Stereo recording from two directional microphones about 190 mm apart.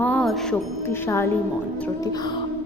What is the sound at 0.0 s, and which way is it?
Music, 5° left (ahead or behind).